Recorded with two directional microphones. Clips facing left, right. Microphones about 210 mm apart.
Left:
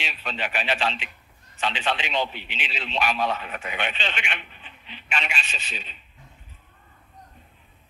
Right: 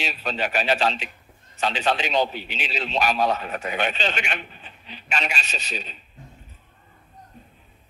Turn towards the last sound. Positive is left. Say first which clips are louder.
# right 6 dB
turn(degrees=-40)  # may be behind; listen again after turning